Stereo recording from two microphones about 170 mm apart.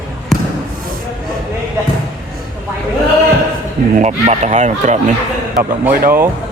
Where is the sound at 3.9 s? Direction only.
40° right (ahead or behind).